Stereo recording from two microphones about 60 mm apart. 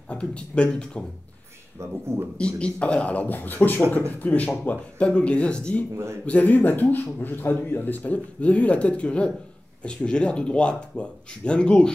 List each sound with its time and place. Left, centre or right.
0.1 s speech: centre
1.8 s speech: right
2.3 s speech: centre